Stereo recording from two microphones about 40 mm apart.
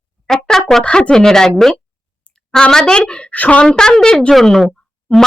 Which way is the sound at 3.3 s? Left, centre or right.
Left.